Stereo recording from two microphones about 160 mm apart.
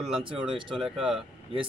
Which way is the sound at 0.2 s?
30° right (ahead or behind).